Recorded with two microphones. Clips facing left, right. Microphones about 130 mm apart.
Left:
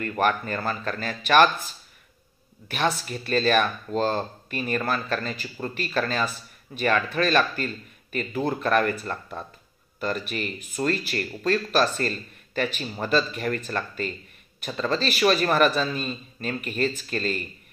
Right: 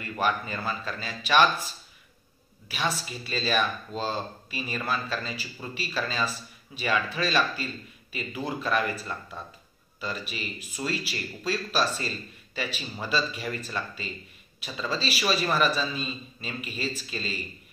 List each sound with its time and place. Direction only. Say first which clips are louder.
0.5 s speech: left 4 dB; 55° left (ahead or behind)
2.7 s speech: left 5 dB; 55° left (ahead or behind)